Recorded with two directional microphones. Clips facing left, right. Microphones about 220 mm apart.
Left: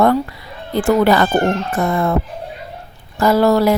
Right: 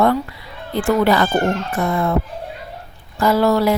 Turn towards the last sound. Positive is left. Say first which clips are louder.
# left 2 dB
turn(degrees=40)  # may be behind; listen again after turning